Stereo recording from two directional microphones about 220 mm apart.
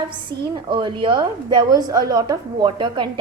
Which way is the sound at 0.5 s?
20° right (ahead or behind).